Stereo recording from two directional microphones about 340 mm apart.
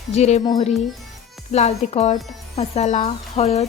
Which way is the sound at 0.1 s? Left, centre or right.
Centre.